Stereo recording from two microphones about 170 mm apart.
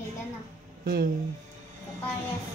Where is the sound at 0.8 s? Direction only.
65° right (ahead or behind).